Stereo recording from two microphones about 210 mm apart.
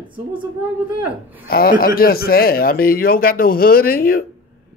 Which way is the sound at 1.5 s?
45° left (ahead or behind).